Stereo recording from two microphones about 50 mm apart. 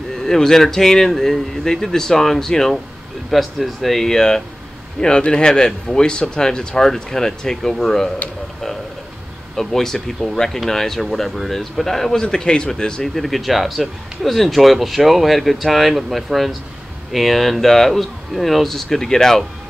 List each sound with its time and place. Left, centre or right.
0.1 s speech: centre
3.3 s speech: centre
9.6 s speech: centre
13.1 s speech: centre